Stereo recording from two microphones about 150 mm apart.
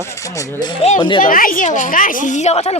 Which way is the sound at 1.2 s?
70° left (ahead or behind).